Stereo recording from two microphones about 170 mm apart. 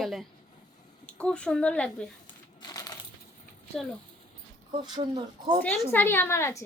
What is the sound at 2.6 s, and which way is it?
Coin, 25° left (ahead or behind).